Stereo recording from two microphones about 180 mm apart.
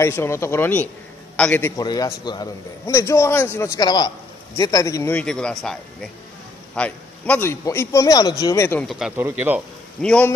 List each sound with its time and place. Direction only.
0.0 s a man's voice: 15° left (ahead or behind)
1.8 s a man's voice: 20° left (ahead or behind)
5.2 s a man's voice: 5° left (ahead or behind)
8.8 s speech: 5° right (ahead or behind)
10.0 s a man's voice: 5° left (ahead or behind)